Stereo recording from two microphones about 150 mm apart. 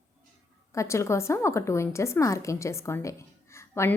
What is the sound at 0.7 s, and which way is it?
A woman's voice, 20° left (ahead or behind).